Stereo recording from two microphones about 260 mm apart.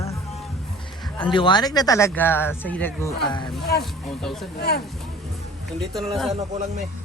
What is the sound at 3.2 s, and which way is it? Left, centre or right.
Speech, centre.